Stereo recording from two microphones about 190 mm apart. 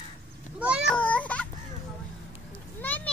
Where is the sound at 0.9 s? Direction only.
5° left (ahead or behind).